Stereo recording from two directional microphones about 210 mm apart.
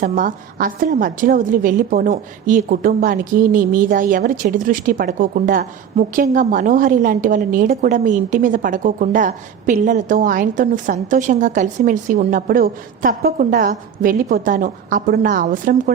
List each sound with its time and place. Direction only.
0.0 s a woman's voice: 40° right (ahead or behind)